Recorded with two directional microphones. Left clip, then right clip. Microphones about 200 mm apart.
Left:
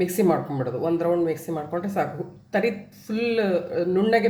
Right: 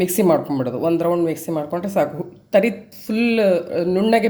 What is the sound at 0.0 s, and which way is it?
Speech, 35° right (ahead or behind).